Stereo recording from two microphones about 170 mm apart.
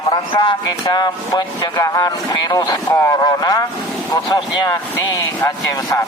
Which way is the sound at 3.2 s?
25° left (ahead or behind).